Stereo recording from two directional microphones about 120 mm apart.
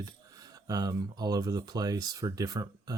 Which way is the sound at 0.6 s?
30° right (ahead or behind).